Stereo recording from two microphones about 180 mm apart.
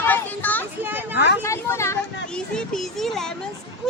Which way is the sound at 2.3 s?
5° left (ahead or behind).